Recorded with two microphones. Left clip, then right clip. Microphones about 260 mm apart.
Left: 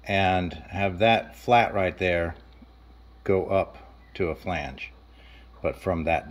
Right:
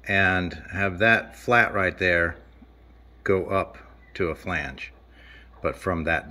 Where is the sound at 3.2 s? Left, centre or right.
Left.